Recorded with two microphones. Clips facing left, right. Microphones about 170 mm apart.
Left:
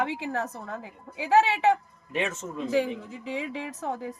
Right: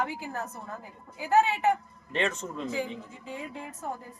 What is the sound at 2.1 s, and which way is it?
Speech, 10° left (ahead or behind).